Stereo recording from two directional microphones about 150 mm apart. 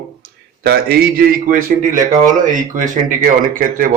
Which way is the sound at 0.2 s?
90° right.